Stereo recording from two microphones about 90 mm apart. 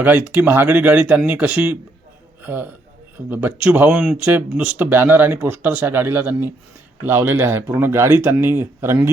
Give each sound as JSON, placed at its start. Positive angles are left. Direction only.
{"t": 0.0, "sound": "a man's voice", "side_deg": -20}